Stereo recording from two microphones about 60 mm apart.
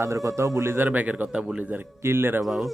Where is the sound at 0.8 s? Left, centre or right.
Right.